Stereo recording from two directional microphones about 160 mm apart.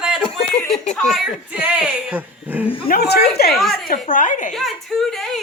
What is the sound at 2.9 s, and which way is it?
Speech, 85° left.